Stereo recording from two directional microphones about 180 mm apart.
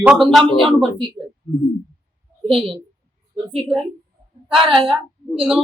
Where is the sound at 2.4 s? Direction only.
30° right (ahead or behind).